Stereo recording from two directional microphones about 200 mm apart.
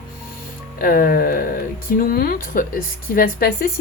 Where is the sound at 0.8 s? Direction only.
45° left (ahead or behind).